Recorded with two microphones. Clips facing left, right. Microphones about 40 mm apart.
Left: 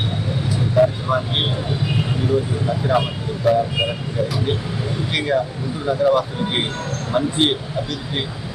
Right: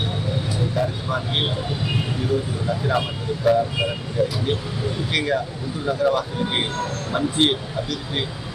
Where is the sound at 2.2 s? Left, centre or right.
Centre.